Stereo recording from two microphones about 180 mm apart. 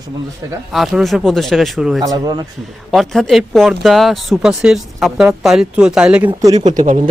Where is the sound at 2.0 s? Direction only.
20° right (ahead or behind).